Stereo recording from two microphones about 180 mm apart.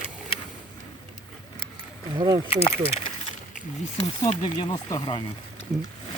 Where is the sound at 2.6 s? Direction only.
30° left (ahead or behind).